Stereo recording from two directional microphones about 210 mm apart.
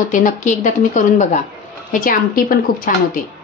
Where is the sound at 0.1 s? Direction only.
35° left (ahead or behind).